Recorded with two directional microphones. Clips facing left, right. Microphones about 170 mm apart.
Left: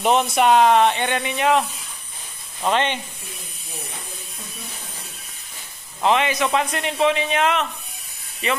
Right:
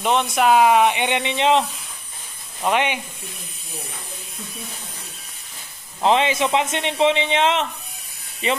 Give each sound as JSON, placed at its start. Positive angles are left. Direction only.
{"t": 0.0, "sound": "speech", "side_deg": 5}
{"t": 2.6, "sound": "speech", "side_deg": -10}
{"t": 6.0, "sound": "a man's voice", "side_deg": -25}